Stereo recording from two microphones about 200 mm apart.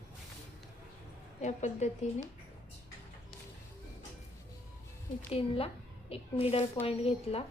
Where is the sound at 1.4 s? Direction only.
35° left (ahead or behind).